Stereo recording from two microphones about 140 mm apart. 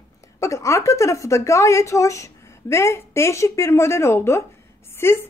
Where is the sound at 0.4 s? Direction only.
20° left (ahead or behind).